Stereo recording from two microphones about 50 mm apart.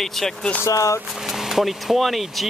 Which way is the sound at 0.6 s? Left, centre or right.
Left.